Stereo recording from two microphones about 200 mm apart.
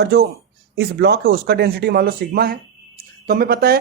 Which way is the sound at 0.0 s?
50° right (ahead or behind).